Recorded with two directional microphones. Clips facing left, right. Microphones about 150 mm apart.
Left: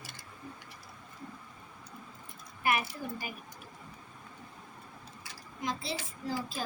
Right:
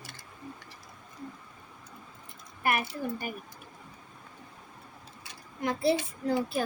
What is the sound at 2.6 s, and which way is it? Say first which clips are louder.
Speech: right 2 dB; 55° right (ahead or behind).